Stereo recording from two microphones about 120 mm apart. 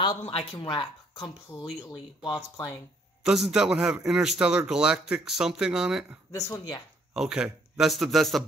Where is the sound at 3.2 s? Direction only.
5° right (ahead or behind).